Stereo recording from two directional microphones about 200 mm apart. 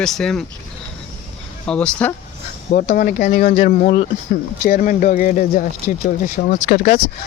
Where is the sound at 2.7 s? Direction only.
45° left (ahead or behind).